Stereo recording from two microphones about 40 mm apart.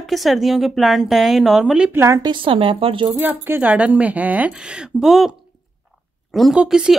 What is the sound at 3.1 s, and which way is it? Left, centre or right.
Speech, right.